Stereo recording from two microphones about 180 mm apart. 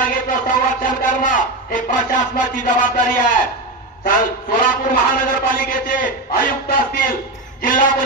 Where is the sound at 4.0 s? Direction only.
50° left (ahead or behind).